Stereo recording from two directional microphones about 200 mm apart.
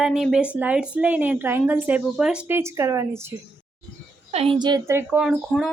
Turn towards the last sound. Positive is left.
turn(degrees=-5)  # may be behind; listen again after turning